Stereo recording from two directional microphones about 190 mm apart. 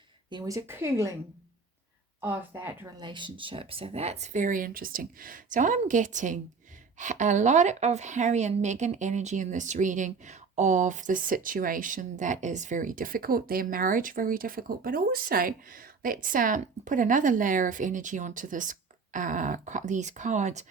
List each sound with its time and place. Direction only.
0.3 s a woman's voice: 20° right (ahead or behind)
2.2 s a woman's voice: 10° right (ahead or behind)
3.0 s a woman's voice: 25° right (ahead or behind)